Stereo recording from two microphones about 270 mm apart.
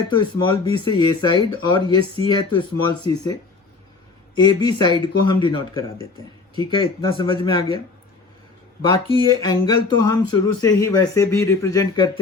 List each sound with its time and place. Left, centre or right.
0.1 s speech: centre
4.4 s speech: centre
9.4 s speech: centre